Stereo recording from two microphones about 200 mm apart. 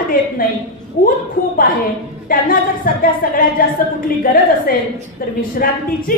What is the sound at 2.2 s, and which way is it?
A woman's voice, 45° left (ahead or behind).